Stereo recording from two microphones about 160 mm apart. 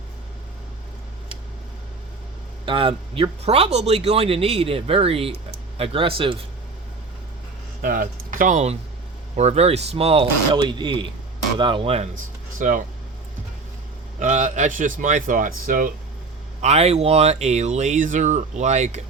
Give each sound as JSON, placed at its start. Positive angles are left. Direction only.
{"t": 2.6, "sound": "speech", "side_deg": -35}
{"t": 7.8, "sound": "speech", "side_deg": -60}
{"t": 12.5, "sound": "speech", "side_deg": -55}
{"t": 14.2, "sound": "speech", "side_deg": -50}
{"t": 16.6, "sound": "speech", "side_deg": -45}